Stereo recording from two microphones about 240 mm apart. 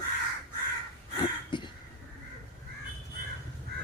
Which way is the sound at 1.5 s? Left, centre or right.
Centre.